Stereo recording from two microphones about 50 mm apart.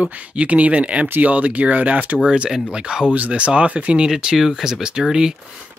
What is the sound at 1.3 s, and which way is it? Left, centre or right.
Speech, right.